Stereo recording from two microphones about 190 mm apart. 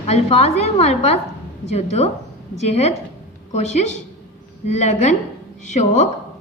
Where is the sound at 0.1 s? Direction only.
35° left (ahead or behind).